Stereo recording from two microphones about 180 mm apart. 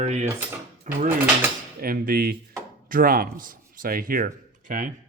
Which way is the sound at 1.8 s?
55° right (ahead or behind).